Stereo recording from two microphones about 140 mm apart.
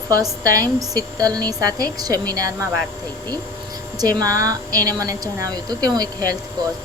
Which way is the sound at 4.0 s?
25° right (ahead or behind).